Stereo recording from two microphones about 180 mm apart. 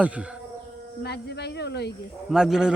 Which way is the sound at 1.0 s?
65° left (ahead or behind).